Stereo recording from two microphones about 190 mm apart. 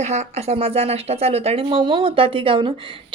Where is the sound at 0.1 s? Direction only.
35° right (ahead or behind).